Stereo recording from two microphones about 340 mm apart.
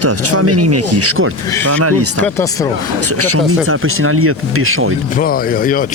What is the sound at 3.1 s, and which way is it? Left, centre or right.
Speech, right.